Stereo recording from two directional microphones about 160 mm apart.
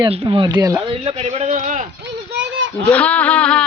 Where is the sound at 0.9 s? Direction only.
40° right (ahead or behind).